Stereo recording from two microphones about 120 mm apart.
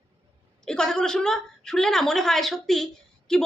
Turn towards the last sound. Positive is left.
turn(degrees=5)  # may be behind; listen again after turning